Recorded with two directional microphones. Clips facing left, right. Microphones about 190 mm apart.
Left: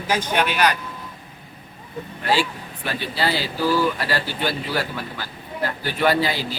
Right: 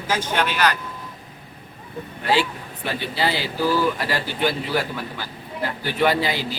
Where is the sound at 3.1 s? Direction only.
20° right (ahead or behind).